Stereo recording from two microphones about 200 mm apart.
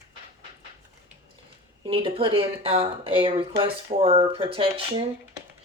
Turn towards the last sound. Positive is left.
turn(degrees=-25)  # may be behind; listen again after turning